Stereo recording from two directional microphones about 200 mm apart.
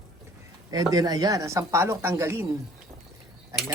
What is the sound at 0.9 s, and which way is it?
Speech, 20° right (ahead or behind).